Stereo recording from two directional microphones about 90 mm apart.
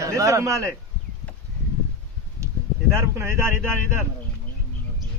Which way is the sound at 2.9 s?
25° right (ahead or behind).